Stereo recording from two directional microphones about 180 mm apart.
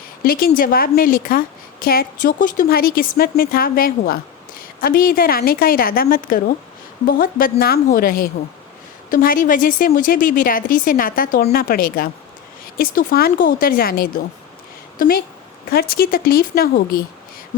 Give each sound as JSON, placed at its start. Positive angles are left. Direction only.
{"t": 0.3, "sound": "a woman's voice", "side_deg": 55}